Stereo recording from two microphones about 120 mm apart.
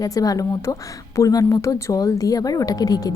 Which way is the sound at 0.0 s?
30° left (ahead or behind).